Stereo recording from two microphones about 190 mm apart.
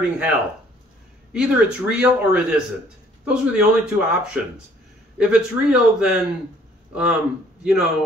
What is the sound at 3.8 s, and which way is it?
Speech, 5° right (ahead or behind).